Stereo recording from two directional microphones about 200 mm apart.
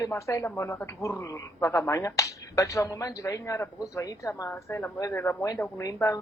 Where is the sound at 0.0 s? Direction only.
15° left (ahead or behind).